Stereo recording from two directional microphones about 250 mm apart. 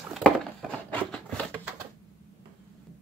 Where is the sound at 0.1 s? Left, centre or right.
Centre.